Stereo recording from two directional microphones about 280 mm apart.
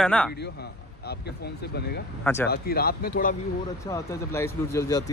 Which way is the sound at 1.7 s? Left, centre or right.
Left.